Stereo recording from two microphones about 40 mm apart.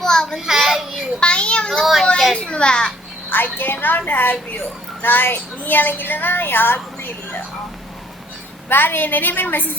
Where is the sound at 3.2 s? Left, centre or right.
Left.